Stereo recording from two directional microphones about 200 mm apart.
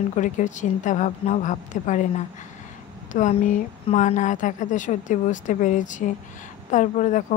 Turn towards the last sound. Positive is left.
turn(degrees=40)  # may be behind; listen again after turning